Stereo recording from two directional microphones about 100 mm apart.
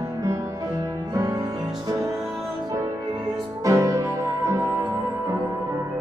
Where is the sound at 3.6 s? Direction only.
35° right (ahead or behind).